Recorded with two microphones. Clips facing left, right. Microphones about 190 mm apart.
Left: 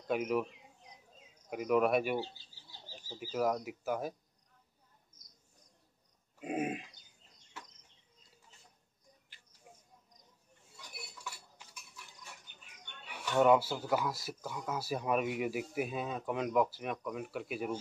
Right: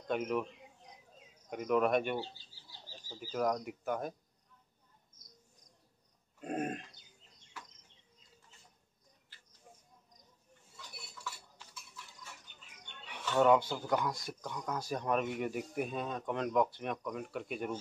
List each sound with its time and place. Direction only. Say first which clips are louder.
0.1 s speech: left 2 dB; 5° left (ahead or behind)
1.5 s speech: left 1 dB; 5° left (ahead or behind)
6.4 s grunt: left 1 dB; 5° left (ahead or behind)
11.5 s a sound: right 2 dB; 15° left (ahead or behind)
13.2 s speech: left 1 dB; 10° left (ahead or behind)